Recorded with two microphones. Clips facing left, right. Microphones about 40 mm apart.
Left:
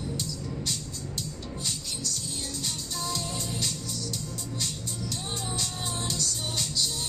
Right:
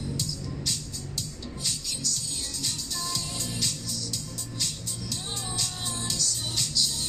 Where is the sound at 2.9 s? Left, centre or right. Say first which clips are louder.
Left 1 dB; left.